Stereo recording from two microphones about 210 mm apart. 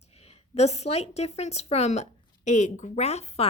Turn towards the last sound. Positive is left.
turn(degrees=30)  # may be behind; listen again after turning